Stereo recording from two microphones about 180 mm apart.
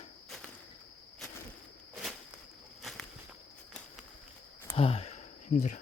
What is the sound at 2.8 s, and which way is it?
Walk, centre (ahead or behind).